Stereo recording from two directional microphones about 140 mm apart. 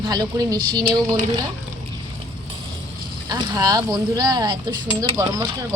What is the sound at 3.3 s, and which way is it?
Speech, 30° right (ahead or behind).